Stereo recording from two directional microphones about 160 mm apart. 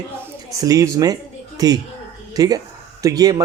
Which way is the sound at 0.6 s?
20° right (ahead or behind).